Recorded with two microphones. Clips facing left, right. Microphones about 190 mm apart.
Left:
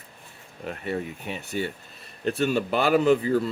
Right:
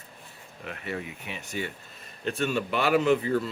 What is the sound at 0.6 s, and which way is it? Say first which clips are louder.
Speech: left 5 dB; 35° left (ahead or behind).